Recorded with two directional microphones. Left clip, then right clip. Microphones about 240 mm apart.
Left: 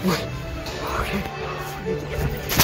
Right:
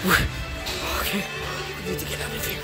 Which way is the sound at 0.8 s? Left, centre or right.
Centre.